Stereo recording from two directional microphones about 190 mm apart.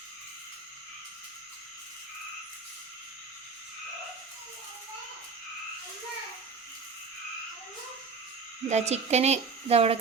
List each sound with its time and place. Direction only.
8.7 s speech: 35° right (ahead or behind)